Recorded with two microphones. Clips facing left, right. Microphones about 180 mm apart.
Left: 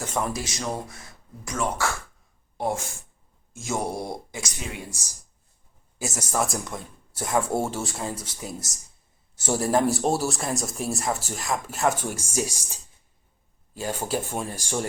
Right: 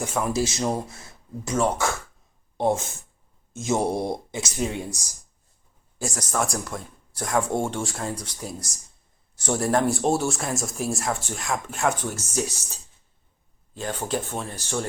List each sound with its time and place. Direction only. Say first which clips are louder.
0.0 s speech: right 1 dB; 10° right (ahead or behind)
0.3 s speech: right 6 dB; 25° right (ahead or behind)
6.0 s speech: even; 5° left (ahead or behind)